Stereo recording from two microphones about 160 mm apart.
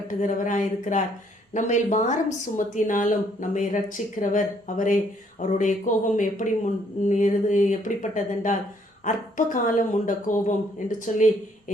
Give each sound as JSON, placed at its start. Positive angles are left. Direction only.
{"t": 0.1, "sound": "speech", "side_deg": 55}